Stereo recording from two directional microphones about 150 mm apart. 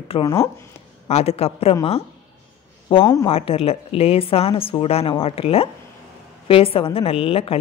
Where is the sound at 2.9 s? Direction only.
35° left (ahead or behind).